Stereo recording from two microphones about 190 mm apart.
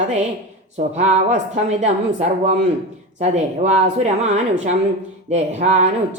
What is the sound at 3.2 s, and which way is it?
Speech, 35° right (ahead or behind).